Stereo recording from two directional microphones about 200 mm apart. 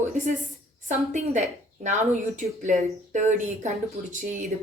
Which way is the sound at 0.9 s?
35° right (ahead or behind).